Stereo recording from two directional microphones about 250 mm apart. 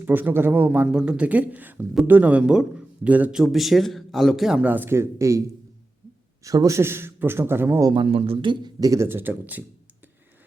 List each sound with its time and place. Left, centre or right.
0.0 s speech: centre
6.4 s speech: centre